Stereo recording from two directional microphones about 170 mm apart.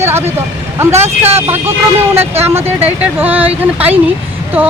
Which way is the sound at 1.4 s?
15° right (ahead or behind).